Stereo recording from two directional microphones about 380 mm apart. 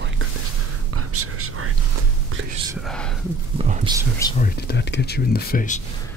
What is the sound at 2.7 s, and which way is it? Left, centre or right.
Speech, centre.